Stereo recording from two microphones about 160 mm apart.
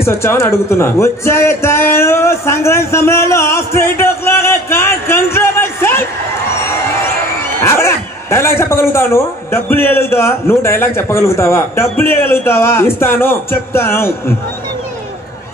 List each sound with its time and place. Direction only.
0.0 s speech: 15° left (ahead or behind)
7.6 s a man's voice: 15° left (ahead or behind)